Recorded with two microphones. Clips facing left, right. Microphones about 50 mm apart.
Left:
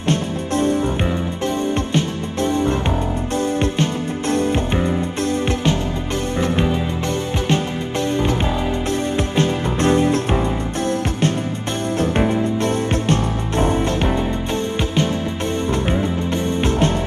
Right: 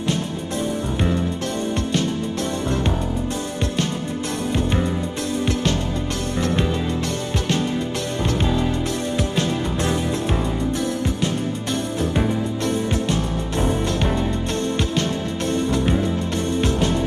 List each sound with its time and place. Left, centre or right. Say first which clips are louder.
0.0 s music: left 3 dB; left
1.9 s music: left 1 dB; left
4.7 s music: left 3 dB; centre
8.2 s music: left 2 dB; centre
9.1 s music: left 3 dB; left
12.2 s music: left 4 dB; left
12.7 s music: left 3 dB; left
13.9 s music: left 2 dB; centre
15.5 s music: right 1 dB; left